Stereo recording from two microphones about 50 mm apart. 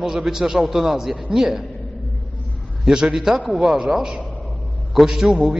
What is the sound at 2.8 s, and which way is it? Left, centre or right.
A man's voice, centre.